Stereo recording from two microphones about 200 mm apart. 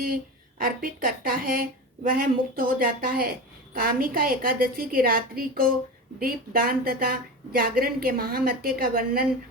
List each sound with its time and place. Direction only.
0.6 s a woman's voice: 45° right (ahead or behind)